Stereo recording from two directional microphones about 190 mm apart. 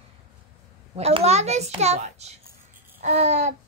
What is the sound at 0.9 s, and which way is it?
Child singing, 30° right (ahead or behind).